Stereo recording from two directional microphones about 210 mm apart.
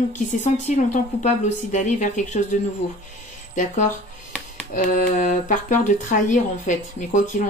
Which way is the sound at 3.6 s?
35° left (ahead or behind).